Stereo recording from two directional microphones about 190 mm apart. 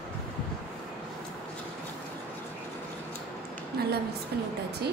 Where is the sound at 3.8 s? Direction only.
55° right (ahead or behind).